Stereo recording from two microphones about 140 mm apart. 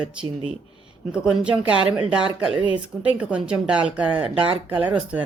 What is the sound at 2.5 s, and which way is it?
Speech, 35° right (ahead or behind).